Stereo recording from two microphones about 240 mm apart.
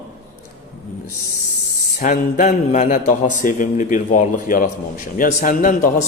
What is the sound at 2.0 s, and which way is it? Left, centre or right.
A man's voice, left.